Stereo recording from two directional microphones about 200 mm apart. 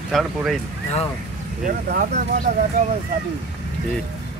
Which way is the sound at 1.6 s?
40° right (ahead or behind).